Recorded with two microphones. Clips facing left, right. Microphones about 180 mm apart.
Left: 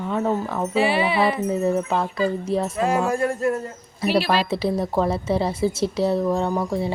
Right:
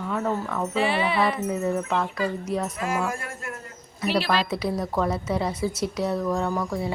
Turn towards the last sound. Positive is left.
turn(degrees=25)  # may be behind; listen again after turning